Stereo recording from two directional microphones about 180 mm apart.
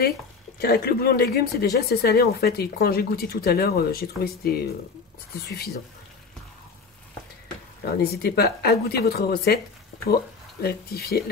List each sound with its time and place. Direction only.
0.6 s speech: 60° left (ahead or behind)
7.8 s speech: 60° left (ahead or behind)